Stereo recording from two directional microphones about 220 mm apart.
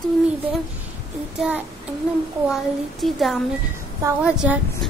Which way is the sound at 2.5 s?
Centre (ahead or behind).